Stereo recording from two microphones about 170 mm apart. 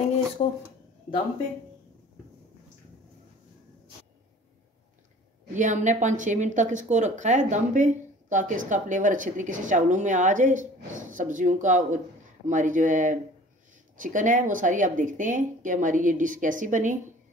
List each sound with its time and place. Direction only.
5.5 s a woman's voice: 45° right (ahead or behind)